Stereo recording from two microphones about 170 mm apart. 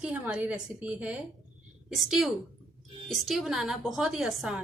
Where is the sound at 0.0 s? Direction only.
5° right (ahead or behind).